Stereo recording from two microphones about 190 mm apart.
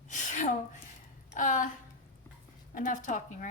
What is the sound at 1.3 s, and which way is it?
Speech, 45° left (ahead or behind).